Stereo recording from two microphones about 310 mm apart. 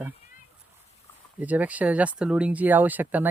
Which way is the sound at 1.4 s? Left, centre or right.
Centre.